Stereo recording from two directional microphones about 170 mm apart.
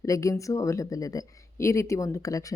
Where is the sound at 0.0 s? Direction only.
20° left (ahead or behind).